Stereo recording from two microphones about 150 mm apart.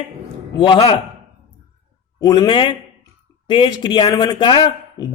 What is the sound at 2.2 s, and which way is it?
Speech, 25° left (ahead or behind).